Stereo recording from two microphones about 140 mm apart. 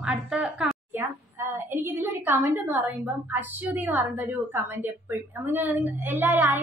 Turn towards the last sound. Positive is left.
turn(degrees=-15)  # may be behind; listen again after turning